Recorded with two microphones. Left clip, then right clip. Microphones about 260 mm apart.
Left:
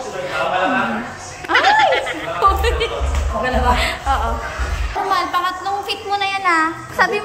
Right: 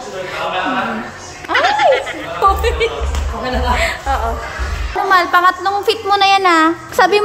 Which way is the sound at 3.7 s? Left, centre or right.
Centre.